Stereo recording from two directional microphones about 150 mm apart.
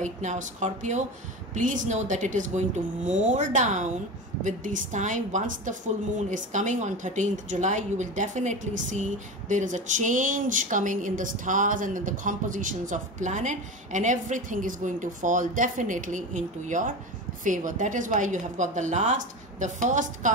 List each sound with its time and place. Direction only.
0.0 s a woman's voice: 55° right (ahead or behind)